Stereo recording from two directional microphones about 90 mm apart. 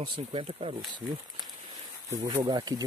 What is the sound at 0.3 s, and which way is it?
Speech, 80° right.